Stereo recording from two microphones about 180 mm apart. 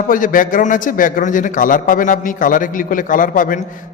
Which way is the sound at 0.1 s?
50° left (ahead or behind).